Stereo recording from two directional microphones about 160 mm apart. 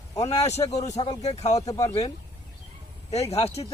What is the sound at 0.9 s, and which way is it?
Speech, 45° left (ahead or behind).